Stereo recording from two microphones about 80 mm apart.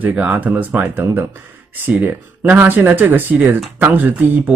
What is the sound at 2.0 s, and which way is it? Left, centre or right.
Speech, right.